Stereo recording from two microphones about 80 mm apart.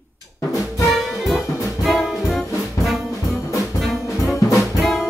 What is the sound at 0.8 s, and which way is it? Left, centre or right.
Music, centre.